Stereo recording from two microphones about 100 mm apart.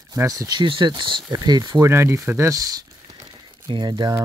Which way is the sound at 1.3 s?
40° right (ahead or behind).